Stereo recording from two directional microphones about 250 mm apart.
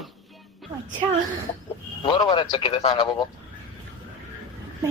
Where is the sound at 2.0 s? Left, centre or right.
Centre.